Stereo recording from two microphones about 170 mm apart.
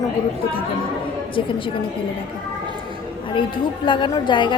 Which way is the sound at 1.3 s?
30° left (ahead or behind).